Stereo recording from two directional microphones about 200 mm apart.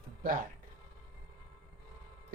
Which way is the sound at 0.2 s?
45° right (ahead or behind).